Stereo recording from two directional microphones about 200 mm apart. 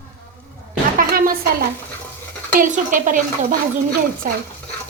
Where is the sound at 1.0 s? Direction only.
45° right (ahead or behind).